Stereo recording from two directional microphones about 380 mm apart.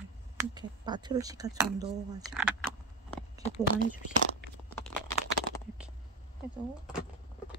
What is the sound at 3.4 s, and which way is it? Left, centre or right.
Speech, left.